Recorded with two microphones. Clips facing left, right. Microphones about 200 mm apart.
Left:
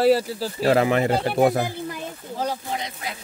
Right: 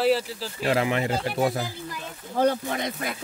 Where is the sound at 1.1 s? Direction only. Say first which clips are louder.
Left 5 dB; 55° left (ahead or behind).